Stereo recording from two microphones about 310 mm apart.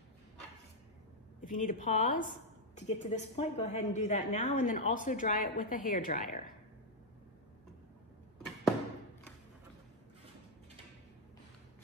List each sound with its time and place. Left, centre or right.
1.4 s a woman's voice: left